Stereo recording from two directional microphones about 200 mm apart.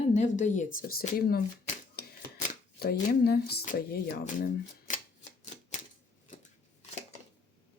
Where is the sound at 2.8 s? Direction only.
50° left (ahead or behind).